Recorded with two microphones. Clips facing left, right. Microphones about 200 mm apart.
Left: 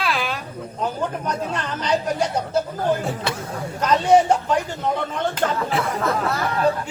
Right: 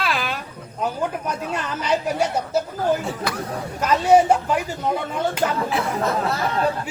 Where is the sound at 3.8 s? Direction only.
10° right (ahead or behind).